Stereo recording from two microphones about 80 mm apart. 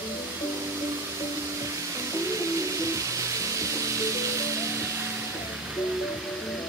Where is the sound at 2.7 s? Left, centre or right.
Right.